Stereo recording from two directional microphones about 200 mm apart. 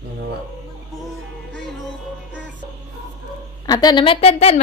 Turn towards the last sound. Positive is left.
turn(degrees=30)  # may be behind; listen again after turning